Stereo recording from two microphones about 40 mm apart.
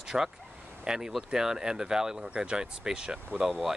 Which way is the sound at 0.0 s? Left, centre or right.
Centre.